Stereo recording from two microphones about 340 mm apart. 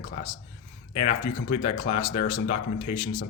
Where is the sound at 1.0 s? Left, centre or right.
Centre.